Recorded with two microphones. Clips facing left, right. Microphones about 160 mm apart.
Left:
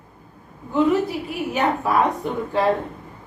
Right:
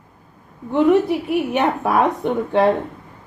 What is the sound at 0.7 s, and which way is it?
A woman's voice, 65° right (ahead or behind).